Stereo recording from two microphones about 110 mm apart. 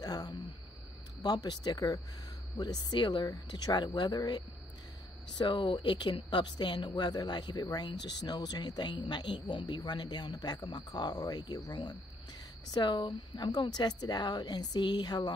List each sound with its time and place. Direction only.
0.0 s a sound: 35° left (ahead or behind)
1.2 s speech: 35° left (ahead or behind)
5.4 s speech: 45° left (ahead or behind)